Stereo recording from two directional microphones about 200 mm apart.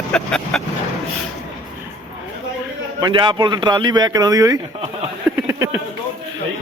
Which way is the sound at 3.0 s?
20° right (ahead or behind).